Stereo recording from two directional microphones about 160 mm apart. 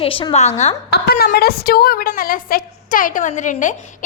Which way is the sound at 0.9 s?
80° left.